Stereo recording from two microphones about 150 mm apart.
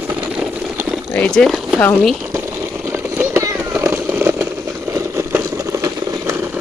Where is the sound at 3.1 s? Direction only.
15° right (ahead or behind).